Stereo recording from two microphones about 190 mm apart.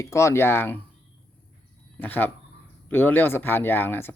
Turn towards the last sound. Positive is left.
turn(degrees=10)  # may be behind; listen again after turning